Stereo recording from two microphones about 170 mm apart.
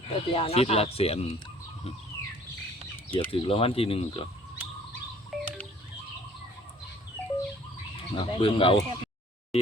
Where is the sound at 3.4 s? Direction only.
35° left (ahead or behind).